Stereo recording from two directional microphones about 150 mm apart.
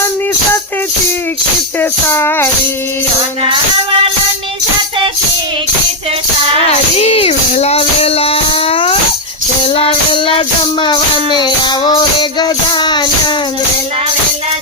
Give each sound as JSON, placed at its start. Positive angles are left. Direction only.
{"t": 1.8, "sound": "music", "side_deg": 15}
{"t": 3.4, "sound": "music", "side_deg": -35}
{"t": 6.7, "sound": "music", "side_deg": 40}